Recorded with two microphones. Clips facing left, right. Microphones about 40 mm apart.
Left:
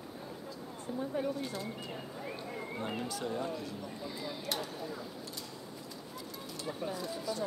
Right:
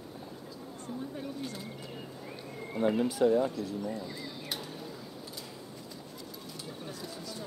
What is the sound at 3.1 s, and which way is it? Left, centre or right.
Speech, centre.